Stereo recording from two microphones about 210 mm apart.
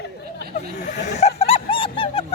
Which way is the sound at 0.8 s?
35° left (ahead or behind).